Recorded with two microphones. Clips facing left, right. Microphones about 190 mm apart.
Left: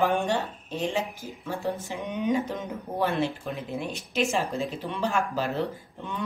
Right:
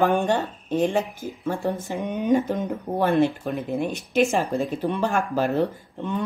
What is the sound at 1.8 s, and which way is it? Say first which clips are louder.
Speech: right 3 dB; 50° right (ahead or behind).